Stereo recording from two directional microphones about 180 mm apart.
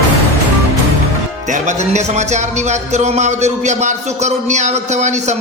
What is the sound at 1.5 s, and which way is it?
Speech, 40° right (ahead or behind).